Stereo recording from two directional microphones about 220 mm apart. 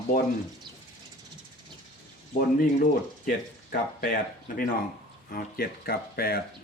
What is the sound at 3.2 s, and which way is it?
Speech, 40° left (ahead or behind).